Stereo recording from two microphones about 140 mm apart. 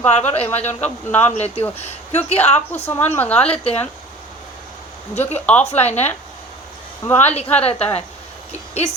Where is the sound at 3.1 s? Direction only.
10° left (ahead or behind).